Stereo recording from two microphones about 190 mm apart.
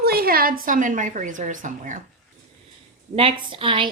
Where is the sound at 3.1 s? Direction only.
30° right (ahead or behind).